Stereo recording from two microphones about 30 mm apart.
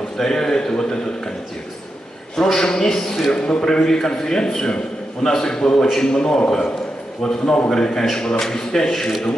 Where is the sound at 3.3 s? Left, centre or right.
Left.